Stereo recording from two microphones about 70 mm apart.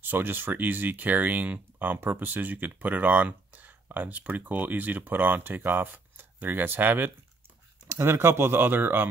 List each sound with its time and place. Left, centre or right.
0.0 s speech: right